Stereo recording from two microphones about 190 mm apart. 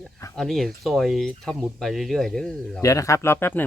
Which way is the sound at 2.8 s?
15° left (ahead or behind).